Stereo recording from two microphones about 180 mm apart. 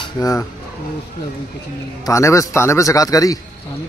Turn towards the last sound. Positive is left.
turn(degrees=20)  # may be behind; listen again after turning